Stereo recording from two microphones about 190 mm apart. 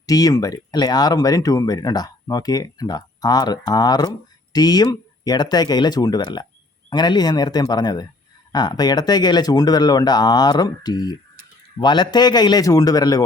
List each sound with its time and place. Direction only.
0.0 s speech: 20° left (ahead or behind)